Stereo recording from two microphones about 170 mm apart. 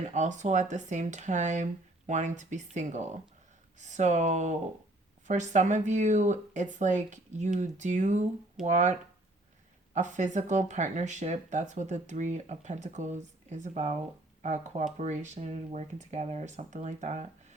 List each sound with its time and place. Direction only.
0.0 s speech: 45° right (ahead or behind)